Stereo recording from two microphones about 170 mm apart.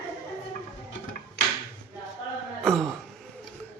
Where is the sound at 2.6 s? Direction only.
Centre (ahead or behind).